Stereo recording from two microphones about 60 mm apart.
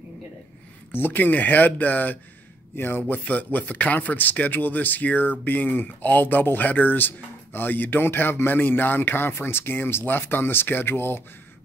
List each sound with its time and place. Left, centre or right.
0.9 s speech: left